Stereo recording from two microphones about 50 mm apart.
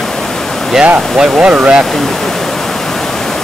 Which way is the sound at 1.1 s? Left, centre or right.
Centre.